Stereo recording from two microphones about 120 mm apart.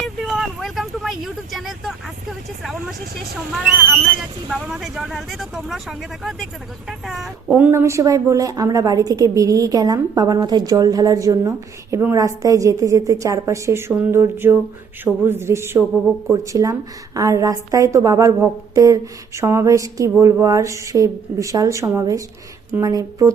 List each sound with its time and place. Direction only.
0.0 s vehicle: centre (ahead or behind)
4.4 s speech: 5° right (ahead or behind)
7.5 s a woman's voice: 15° right (ahead or behind)